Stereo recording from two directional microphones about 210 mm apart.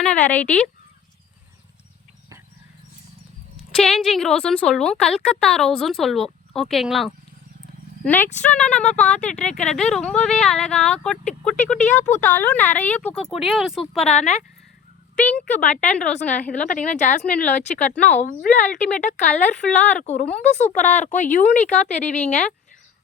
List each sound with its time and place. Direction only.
0.0 s speech: 5° left (ahead or behind)
3.8 s a woman's voice: centre (ahead or behind)
14.1 s speech: 30° left (ahead or behind)
15.1 s a woman's voice: 5° left (ahead or behind)
15.5 s speech: 35° left (ahead or behind)